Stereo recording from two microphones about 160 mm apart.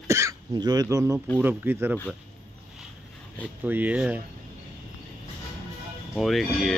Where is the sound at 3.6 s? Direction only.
10° right (ahead or behind).